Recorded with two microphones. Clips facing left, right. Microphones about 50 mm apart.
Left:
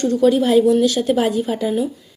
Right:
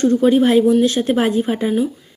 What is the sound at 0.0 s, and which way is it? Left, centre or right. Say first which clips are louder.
A woman's voice: right 2 dB; right.